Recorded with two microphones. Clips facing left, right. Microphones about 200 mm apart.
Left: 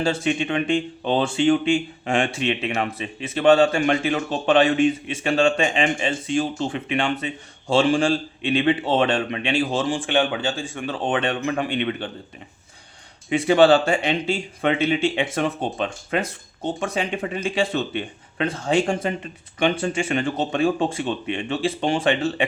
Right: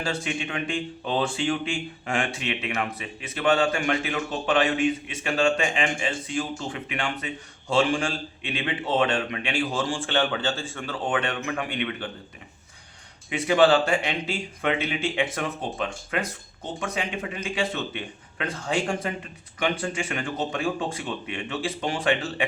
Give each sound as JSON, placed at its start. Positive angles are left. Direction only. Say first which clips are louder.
{"t": 0.0, "sound": "speech", "louder": "left 7 dB", "side_deg": 25}
{"t": 13.3, "sound": "speech", "louder": "left 4 dB", "side_deg": 30}
{"t": 17.7, "sound": "speech", "louder": "left 6 dB", "side_deg": 35}